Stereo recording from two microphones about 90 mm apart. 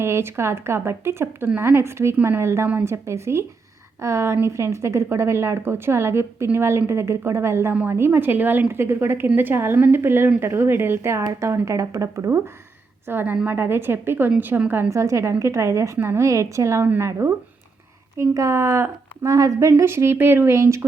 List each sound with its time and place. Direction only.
0.0 s a woman's voice: 30° right (ahead or behind)